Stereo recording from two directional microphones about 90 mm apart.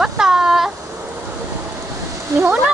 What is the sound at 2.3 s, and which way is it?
Speech, 40° right (ahead or behind).